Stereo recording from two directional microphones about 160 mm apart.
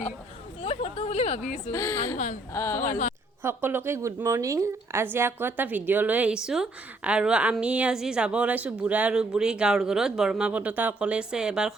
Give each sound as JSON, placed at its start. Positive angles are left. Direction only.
{"t": 0.6, "sound": "a sound", "side_deg": 35}
{"t": 1.7, "sound": "a woman's voice", "side_deg": 20}
{"t": 2.1, "sound": "speech", "side_deg": 50}
{"t": 2.5, "sound": "speech", "side_deg": 15}
{"t": 3.4, "sound": "a woman's voice", "side_deg": -15}